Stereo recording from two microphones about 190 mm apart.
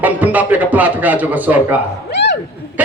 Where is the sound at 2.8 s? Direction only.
10° right (ahead or behind).